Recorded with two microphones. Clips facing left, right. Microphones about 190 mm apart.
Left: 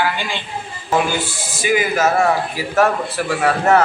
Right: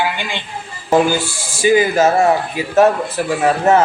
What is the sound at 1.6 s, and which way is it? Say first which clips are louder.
A woman's voice: right 5 dB; 30° right (ahead or behind).